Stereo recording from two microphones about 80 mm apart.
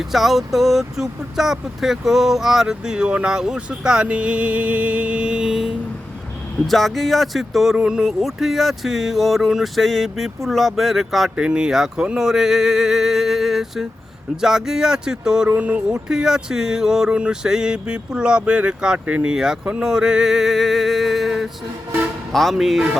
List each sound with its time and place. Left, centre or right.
0.0 s speech: centre
15.4 s speech: centre
16.0 s speech: centre